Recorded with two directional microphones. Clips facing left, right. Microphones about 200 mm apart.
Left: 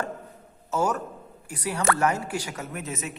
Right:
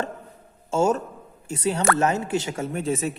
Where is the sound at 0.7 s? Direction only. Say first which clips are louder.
Right 5 dB; 25° right (ahead or behind).